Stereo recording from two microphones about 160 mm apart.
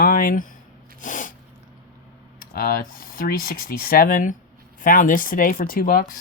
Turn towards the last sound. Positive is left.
turn(degrees=60)  # may be behind; listen again after turning